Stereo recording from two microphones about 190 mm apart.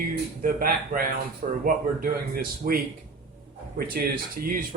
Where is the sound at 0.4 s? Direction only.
50° right (ahead or behind).